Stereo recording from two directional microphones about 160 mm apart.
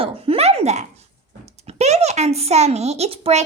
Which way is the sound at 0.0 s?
40° right (ahead or behind).